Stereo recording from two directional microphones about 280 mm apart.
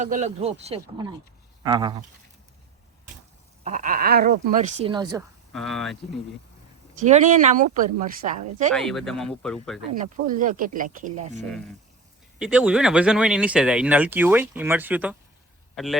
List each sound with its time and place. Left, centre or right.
0.0 s speech: right
3.6 s speech: right
5.5 s speech: centre
6.9 s speech: right
8.7 s speech: centre
10.0 s speech: right
12.4 s a man's voice: centre